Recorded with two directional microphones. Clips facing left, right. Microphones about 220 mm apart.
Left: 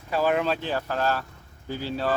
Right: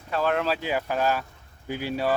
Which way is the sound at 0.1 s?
5° left (ahead or behind).